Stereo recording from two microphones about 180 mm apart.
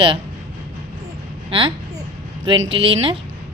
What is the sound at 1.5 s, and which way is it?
A woman's voice, 30° right (ahead or behind).